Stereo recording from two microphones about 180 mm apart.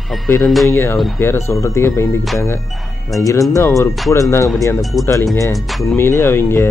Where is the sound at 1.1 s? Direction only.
15° left (ahead or behind).